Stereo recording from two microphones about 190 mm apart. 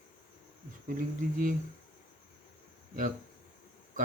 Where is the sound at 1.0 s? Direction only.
45° right (ahead or behind).